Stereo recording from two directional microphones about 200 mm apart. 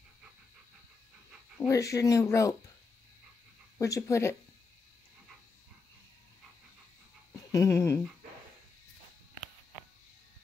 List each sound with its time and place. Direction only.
1.7 s speech: 15° left (ahead or behind)
3.7 s speech: 15° left (ahead or behind)
7.5 s speech: 15° left (ahead or behind)